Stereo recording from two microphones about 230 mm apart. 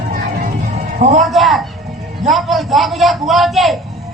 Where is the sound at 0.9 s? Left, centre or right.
Right.